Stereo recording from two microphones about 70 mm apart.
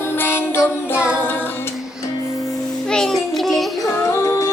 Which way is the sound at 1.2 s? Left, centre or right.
Left.